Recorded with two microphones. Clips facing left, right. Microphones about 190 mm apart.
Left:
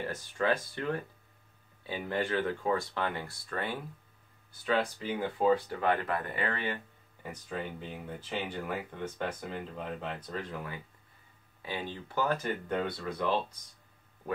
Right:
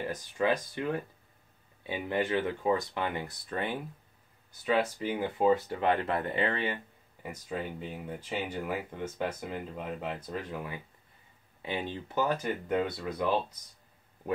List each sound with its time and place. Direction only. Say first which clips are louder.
0.0 s speech: right 2 dB; 15° right (ahead or behind)
5.5 s speech: even; 25° right (ahead or behind)
7.2 s speech: right 2 dB; 10° right (ahead or behind)
11.6 s speech: right 3 dB; 20° right (ahead or behind)